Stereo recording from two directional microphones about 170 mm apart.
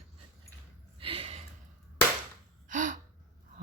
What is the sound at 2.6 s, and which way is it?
Gasp, 50° right (ahead or behind).